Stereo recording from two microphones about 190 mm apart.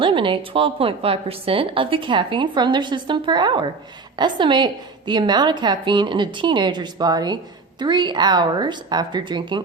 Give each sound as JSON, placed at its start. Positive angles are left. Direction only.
{"t": 0.0, "sound": "a woman's voice", "side_deg": -25}